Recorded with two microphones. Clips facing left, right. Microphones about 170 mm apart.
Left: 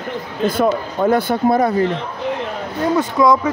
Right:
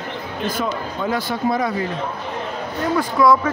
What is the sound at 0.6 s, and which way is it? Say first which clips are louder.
Speech: left 10 dB; 55° left (ahead or behind).